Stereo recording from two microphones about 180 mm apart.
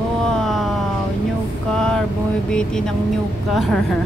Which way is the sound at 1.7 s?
5° left (ahead or behind).